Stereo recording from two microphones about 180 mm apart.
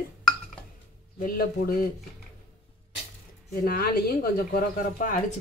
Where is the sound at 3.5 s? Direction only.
55° left (ahead or behind).